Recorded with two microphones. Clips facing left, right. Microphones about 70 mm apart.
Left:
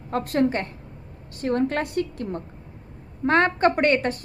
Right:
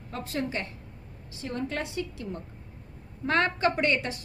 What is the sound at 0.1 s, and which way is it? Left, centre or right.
A woman's voice, left.